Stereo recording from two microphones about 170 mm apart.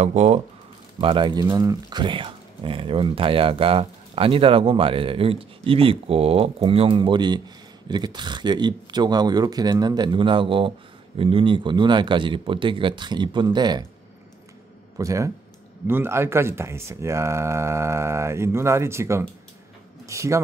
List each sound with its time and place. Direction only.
0.0 s speech: 40° right (ahead or behind)
1.0 s speech: 30° right (ahead or behind)
15.0 s speech: 20° right (ahead or behind)